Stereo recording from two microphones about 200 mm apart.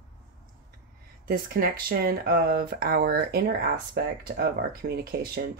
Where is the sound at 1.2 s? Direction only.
45° right (ahead or behind).